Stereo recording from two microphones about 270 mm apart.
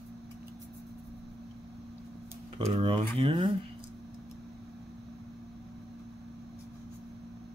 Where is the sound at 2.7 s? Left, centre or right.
Centre.